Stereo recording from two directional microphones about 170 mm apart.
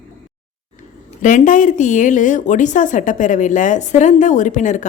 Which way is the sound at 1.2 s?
50° left (ahead or behind).